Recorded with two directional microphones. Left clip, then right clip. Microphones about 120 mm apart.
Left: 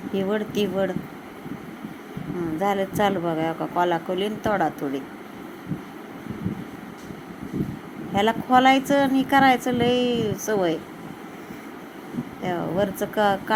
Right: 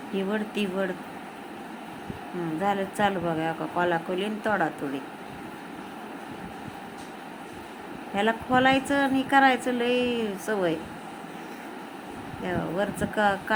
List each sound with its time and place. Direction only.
0.1 s a woman's voice: 25° left (ahead or behind)
2.6 s a woman's voice: 20° left (ahead or behind)
8.1 s a woman's voice: 25° left (ahead or behind)
12.5 s a woman's voice: 20° left (ahead or behind)